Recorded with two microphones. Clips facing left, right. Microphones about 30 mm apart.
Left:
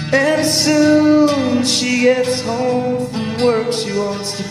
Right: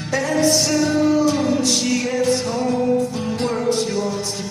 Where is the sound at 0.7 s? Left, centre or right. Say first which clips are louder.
Left 7 dB; left.